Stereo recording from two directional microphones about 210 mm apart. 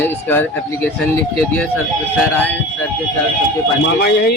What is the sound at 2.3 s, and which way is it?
Speech, 10° left (ahead or behind).